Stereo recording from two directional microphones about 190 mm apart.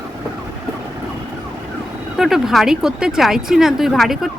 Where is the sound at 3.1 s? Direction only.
Centre (ahead or behind).